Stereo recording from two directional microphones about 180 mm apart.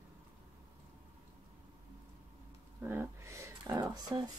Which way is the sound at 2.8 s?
10° right (ahead or behind).